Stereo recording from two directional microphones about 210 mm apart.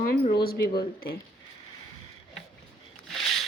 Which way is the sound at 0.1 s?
45° left (ahead or behind).